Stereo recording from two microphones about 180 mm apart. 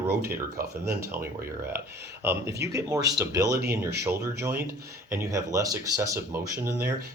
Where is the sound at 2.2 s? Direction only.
15° right (ahead or behind).